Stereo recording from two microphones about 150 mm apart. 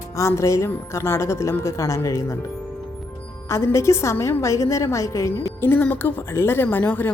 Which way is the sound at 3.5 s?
20° left (ahead or behind).